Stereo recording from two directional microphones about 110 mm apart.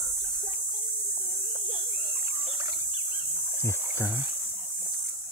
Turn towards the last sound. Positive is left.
turn(degrees=25)  # may be behind; listen again after turning